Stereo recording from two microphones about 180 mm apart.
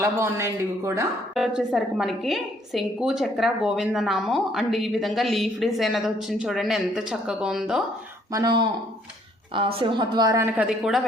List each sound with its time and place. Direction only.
0.0 s a man's voice: 15° right (ahead or behind)
1.4 s a woman's voice: centre (ahead or behind)
8.3 s a woman's voice: 20° right (ahead or behind)
10.7 s a woman's voice: centre (ahead or behind)